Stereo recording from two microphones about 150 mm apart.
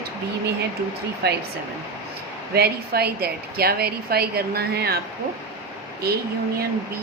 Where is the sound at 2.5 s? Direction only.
90° right.